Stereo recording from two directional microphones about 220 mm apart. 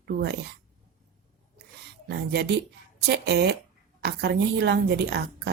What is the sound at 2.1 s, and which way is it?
A woman's voice, 50° right (ahead or behind).